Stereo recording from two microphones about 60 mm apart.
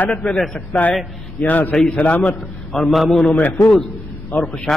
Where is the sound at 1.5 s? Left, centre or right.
Left.